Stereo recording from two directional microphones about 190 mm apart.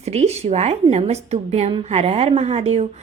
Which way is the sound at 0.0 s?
35° right (ahead or behind).